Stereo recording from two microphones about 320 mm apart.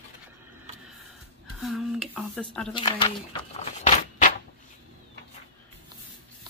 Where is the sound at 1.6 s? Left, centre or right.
Centre.